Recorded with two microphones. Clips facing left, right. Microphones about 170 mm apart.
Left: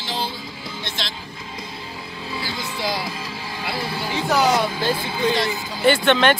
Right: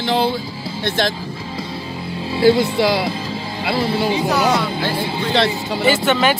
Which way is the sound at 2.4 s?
65° right (ahead or behind).